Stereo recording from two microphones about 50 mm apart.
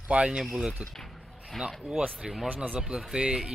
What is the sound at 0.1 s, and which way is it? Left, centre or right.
Speech, right.